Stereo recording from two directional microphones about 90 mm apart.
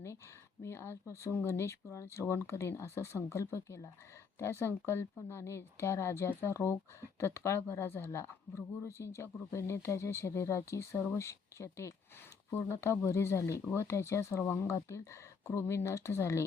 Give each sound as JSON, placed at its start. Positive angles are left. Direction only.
{"t": 0.6, "sound": "speech", "side_deg": 30}